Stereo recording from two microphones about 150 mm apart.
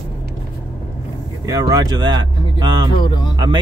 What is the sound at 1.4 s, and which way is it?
Speech, 25° right (ahead or behind).